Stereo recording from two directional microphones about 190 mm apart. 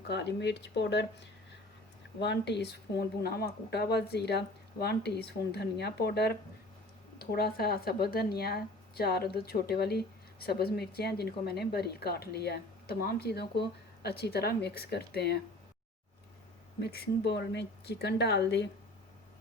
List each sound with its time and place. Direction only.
0.1 s speech: 65° left (ahead or behind)
2.2 s speech: 65° left (ahead or behind)
16.8 s speech: 55° left (ahead or behind)